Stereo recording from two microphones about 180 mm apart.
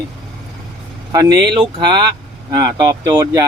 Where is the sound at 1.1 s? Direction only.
20° right (ahead or behind).